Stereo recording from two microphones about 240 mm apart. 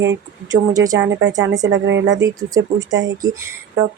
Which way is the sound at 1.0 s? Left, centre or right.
Right.